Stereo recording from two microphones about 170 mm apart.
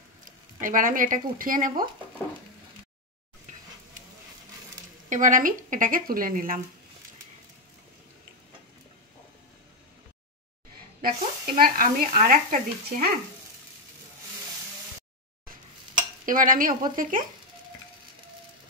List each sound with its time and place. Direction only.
0.6 s speech: 50° right (ahead or behind)
5.1 s speech: 50° right (ahead or behind)
11.0 s speech: 60° right (ahead or behind)
16.3 s speech: 55° right (ahead or behind)